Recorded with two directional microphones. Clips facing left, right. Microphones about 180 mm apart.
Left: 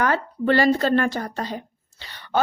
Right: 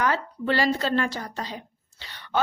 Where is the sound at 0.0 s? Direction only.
55° left (ahead or behind).